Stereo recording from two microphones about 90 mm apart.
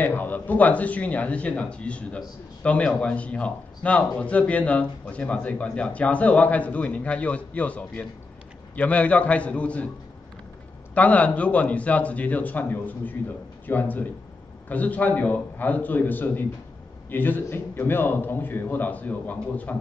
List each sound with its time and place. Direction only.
0.0 s speech: 20° left (ahead or behind)
11.0 s a man's voice: 15° left (ahead or behind)